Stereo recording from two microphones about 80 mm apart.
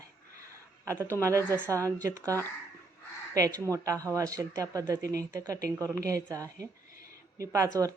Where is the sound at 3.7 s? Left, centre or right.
Right.